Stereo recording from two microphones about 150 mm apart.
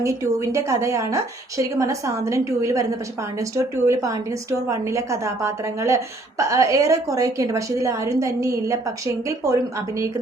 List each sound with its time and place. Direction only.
0.0 s a woman's voice: 20° right (ahead or behind)
3.8 s a woman's voice: 20° right (ahead or behind)